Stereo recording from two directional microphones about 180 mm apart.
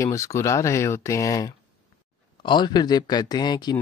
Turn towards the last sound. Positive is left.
turn(degrees=25)  # may be behind; listen again after turning